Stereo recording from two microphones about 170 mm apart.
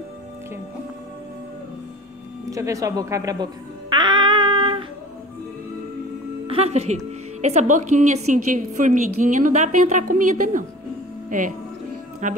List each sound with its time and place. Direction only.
2.5 s speech: 20° right (ahead or behind)
3.9 s music: 25° right (ahead or behind)
6.4 s a woman's voice: 35° right (ahead or behind)